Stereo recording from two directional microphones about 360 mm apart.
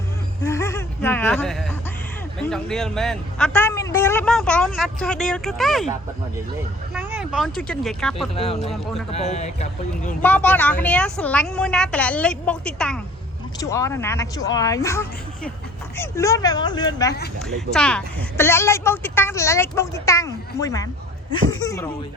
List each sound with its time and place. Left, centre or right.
0.4 s a sound: centre
2.4 s a man's voice: centre
8.4 s a woman's voice: centre
8.7 s a man's voice: centre
9.1 s speech: centre
10.2 s a man's voice: centre